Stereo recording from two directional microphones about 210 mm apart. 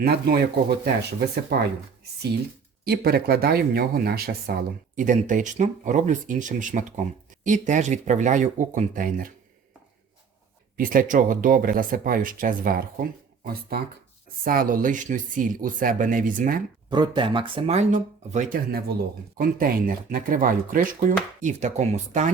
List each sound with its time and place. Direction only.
0.0 s speech: 50° right (ahead or behind)
1.5 s speech: 50° right (ahead or behind)
2.8 s speech: 45° right (ahead or behind)
10.8 s speech: 40° right (ahead or behind)
16.9 s speech: 20° right (ahead or behind)